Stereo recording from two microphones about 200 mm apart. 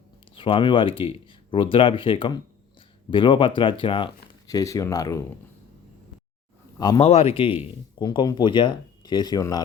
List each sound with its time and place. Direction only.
0.3 s speech: 25° left (ahead or behind)
6.7 s speech: 20° left (ahead or behind)
7.0 s speech: 30° left (ahead or behind)